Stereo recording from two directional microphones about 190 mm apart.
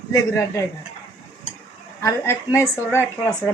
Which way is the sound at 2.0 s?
15° left (ahead or behind).